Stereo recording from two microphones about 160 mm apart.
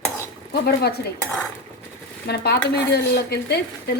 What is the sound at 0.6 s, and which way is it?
Dishes, 80° left.